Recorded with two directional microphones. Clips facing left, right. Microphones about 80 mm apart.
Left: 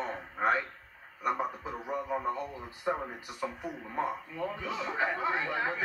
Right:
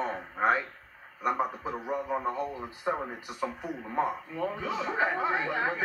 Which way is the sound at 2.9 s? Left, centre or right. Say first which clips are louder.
Right 1 dB; centre.